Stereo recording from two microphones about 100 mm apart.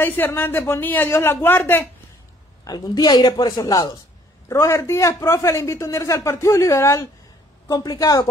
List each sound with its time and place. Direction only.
0.0 s a man's voice: 20° left (ahead or behind)
2.6 s a man's voice: 45° left (ahead or behind)
7.6 s a woman's voice: 40° left (ahead or behind)